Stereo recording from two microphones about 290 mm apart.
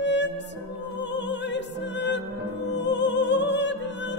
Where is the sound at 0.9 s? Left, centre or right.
Left.